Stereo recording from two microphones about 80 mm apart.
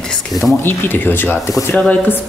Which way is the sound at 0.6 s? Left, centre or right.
Left.